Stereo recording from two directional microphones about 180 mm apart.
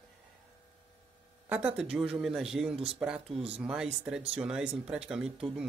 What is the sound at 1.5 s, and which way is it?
Speech, 5° right (ahead or behind).